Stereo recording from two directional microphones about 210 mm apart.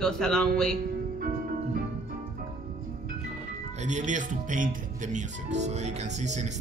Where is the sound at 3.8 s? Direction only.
35° right (ahead or behind).